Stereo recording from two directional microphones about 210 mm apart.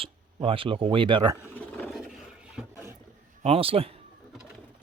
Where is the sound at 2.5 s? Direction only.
15° right (ahead or behind).